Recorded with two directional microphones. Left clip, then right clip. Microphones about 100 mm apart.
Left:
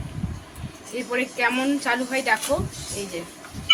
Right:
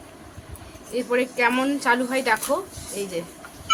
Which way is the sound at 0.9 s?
30° right (ahead or behind).